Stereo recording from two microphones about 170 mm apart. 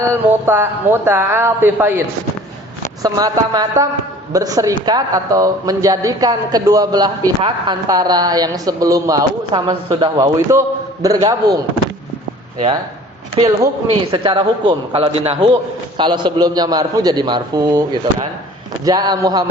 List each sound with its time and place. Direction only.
0.0 s a man's voice: 15° right (ahead or behind)
13.4 s a man's voice: 30° right (ahead or behind)